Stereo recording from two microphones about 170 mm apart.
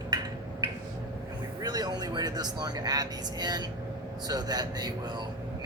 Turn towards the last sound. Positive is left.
turn(degrees=-25)  # may be behind; listen again after turning